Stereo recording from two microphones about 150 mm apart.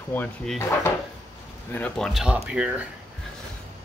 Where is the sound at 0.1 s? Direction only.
15° left (ahead or behind).